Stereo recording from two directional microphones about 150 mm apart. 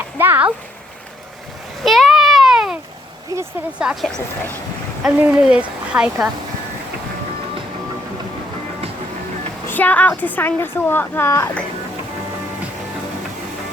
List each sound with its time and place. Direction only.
0.2 s speech: 10° right (ahead or behind)
1.8 s a sound: centre (ahead or behind)
3.3 s speech: 20° right (ahead or behind)
3.8 s a woman's voice: centre (ahead or behind)
9.6 s a woman's voice: 10° left (ahead or behind)